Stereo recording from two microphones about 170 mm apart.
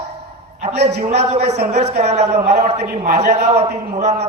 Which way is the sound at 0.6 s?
40° right (ahead or behind).